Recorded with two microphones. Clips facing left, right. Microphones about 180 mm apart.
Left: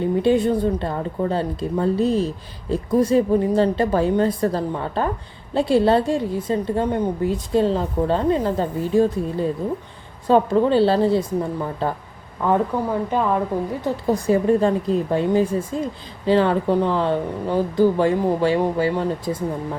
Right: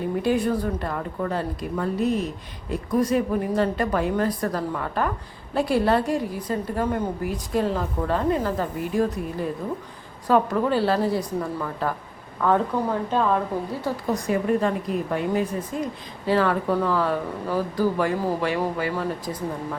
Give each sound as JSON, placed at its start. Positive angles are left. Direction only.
{"t": 0.0, "sound": "a woman's voice", "side_deg": 25}
{"t": 12.4, "sound": "a woman's voice", "side_deg": 15}
{"t": 14.1, "sound": "a woman's voice", "side_deg": 30}